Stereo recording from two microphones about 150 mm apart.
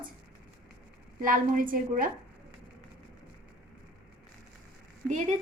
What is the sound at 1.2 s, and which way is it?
Speech, 65° right (ahead or behind).